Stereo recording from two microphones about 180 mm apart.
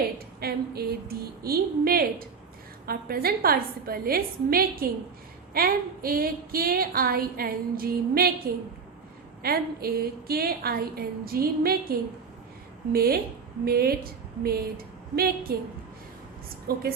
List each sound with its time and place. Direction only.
0.3 s a woman's voice: 60° right (ahead or behind)
9.4 s a woman's voice: 60° right (ahead or behind)
16.7 s a woman's voice: 60° right (ahead or behind)